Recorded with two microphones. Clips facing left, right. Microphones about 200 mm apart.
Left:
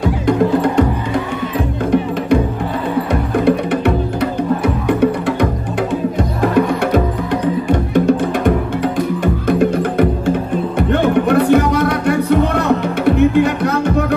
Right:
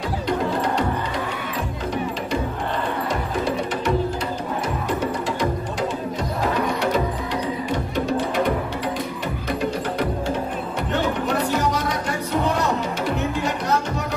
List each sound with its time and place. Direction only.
3.1 s music: 60° left (ahead or behind)